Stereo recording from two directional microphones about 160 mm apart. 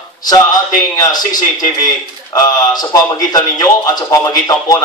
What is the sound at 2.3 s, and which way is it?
A man's voice, 25° left (ahead or behind).